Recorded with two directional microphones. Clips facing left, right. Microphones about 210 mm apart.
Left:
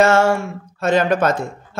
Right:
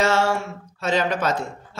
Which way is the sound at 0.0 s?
50° left (ahead or behind).